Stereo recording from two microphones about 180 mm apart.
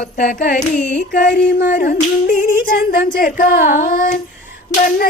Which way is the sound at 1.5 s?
60° left (ahead or behind).